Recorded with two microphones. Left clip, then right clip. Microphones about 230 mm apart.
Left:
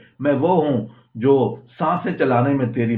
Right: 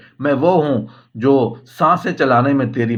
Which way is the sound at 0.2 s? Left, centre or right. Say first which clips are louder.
Right 3 dB; right.